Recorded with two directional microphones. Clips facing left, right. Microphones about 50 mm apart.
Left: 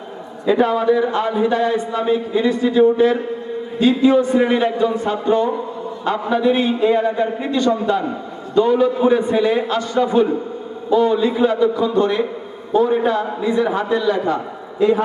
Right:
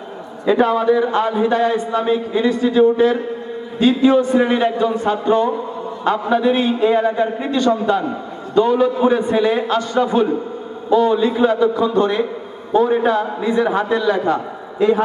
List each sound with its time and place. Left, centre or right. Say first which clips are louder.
0.4 s a man's voice: right 1 dB; right